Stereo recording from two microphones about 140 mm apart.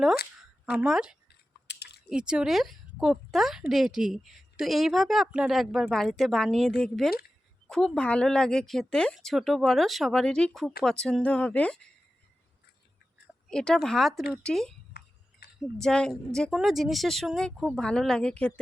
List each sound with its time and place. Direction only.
0.6 s speech: 5° right (ahead or behind)
13.5 s speech: 5° left (ahead or behind)
15.4 s a sound: 90° left
15.8 s speech: 5° left (ahead or behind)